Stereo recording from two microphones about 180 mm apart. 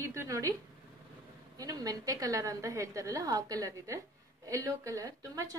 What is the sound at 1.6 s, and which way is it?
A woman's voice, 20° right (ahead or behind).